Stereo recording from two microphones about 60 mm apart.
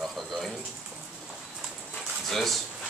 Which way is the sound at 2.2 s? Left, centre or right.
Centre.